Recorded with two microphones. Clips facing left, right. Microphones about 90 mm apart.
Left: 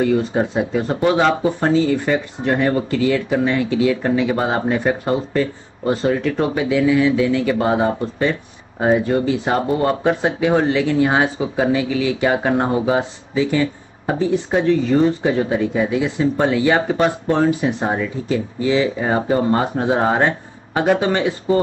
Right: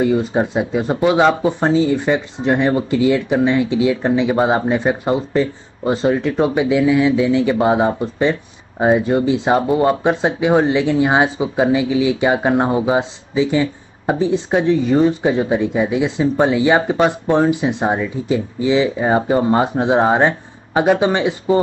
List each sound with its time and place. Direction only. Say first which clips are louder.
0.0 s speech: right 1 dB; 20° right (ahead or behind)